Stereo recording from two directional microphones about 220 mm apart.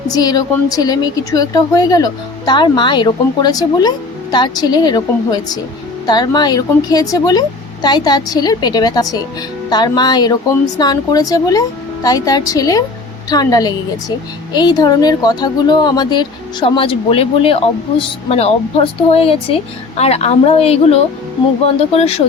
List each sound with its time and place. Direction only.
0.1 s a woman's voice: 20° left (ahead or behind)